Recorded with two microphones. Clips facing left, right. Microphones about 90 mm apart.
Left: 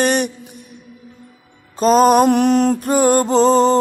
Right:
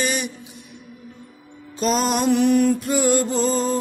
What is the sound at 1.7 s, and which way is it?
Music, 40° left (ahead or behind).